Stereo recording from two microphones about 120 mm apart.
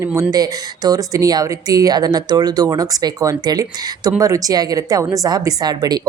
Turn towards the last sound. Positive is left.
turn(degrees=-35)  # may be behind; listen again after turning